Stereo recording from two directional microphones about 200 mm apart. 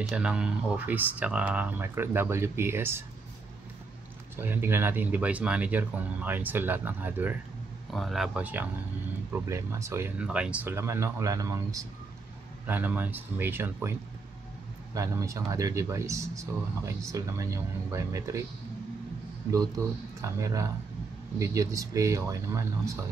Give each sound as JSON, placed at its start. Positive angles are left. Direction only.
{"t": 0.1, "sound": "speech", "side_deg": -5}
{"t": 4.4, "sound": "speech", "side_deg": -10}
{"t": 15.0, "sound": "speech", "side_deg": -15}
{"t": 20.2, "sound": "speech", "side_deg": -15}